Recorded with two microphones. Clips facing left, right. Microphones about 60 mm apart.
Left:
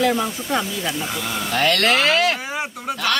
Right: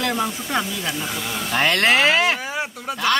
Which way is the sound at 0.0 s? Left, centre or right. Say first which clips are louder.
Left 3 dB; centre.